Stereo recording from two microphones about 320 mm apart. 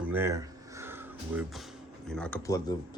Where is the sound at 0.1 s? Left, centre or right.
Centre.